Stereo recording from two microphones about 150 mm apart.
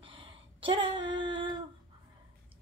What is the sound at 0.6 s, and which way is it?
Female singing, 35° right (ahead or behind).